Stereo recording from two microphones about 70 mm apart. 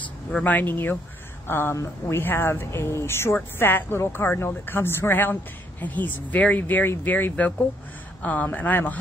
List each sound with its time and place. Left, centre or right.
0.4 s speech: left
2.2 s speech: left